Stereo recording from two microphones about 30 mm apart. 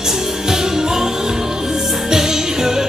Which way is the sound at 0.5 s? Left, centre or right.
Centre.